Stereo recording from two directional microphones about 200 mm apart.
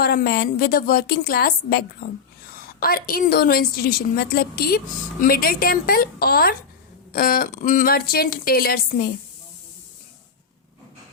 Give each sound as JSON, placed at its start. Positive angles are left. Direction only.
{"t": 0.0, "sound": "speech", "side_deg": 50}